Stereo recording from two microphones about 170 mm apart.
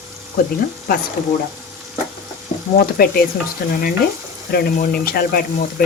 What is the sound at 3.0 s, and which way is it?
Speech, 65° left (ahead or behind).